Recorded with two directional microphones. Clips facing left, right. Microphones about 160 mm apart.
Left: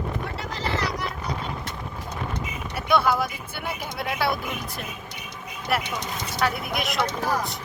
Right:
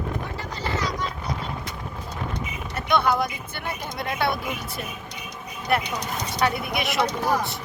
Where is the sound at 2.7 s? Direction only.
5° left (ahead or behind).